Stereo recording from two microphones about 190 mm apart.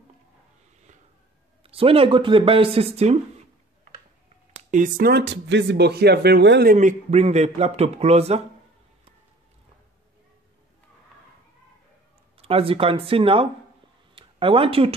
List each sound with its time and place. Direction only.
1.6 s speech: 30° right (ahead or behind)
4.6 s speech: 40° right (ahead or behind); by 6.7 s 60° right (ahead or behind)
6.7 s a man's voice: 40° right (ahead or behind)
12.4 s speech: 30° right (ahead or behind)